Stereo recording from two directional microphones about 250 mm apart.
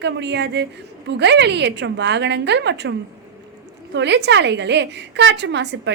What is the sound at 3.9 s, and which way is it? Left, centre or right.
A woman's voice, right.